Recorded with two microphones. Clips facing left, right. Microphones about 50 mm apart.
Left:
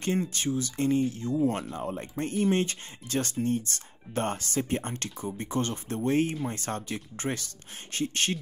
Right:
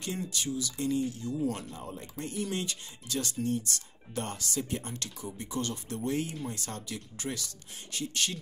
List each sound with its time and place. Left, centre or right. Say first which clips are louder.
0.0 s speech: left 6 dB; left